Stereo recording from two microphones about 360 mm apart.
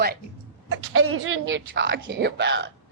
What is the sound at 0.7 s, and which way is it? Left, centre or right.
A woman's voice, right.